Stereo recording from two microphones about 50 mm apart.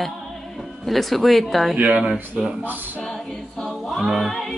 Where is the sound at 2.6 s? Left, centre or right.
Right.